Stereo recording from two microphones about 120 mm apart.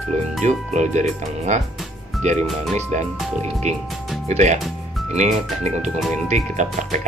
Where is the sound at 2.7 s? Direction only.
70° right (ahead or behind).